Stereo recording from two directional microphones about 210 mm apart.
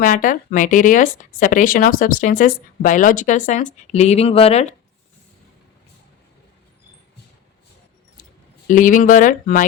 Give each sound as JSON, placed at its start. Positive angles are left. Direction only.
{"t": 0.0, "sound": "speech", "side_deg": 40}
{"t": 8.6, "sound": "speech", "side_deg": 40}